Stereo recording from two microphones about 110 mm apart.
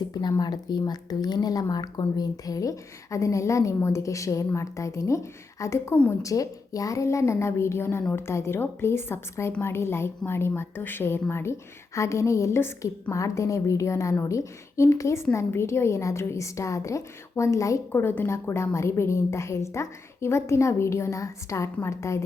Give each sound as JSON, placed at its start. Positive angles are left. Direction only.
{"t": 0.1, "sound": "a woman's voice", "side_deg": 40}